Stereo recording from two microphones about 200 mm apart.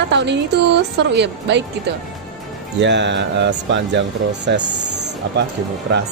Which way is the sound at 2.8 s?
60° right (ahead or behind).